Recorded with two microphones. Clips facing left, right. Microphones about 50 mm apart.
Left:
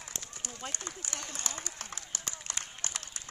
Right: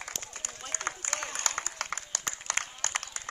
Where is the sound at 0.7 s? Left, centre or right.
Right.